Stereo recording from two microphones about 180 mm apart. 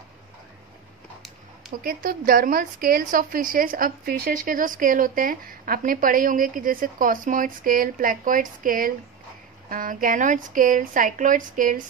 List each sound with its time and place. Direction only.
1.8 s a woman's voice: 55° right (ahead or behind)